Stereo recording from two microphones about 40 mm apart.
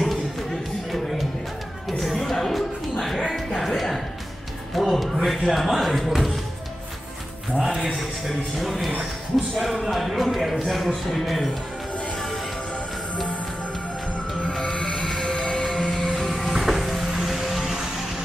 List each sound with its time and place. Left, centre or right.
1.9 s music: centre
5.1 s speech: centre
7.5 s speech: centre
14.6 s music: left
16.3 s music: centre